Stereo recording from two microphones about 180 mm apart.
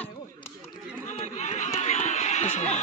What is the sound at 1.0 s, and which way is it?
Chatter, 40° left (ahead or behind).